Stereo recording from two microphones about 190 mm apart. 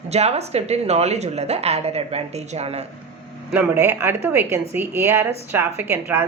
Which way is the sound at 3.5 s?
10° right (ahead or behind).